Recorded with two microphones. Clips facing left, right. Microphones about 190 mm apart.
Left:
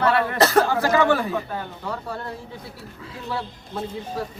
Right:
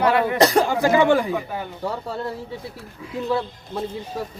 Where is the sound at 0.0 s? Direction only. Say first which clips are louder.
Right 2 dB; 15° right (ahead or behind).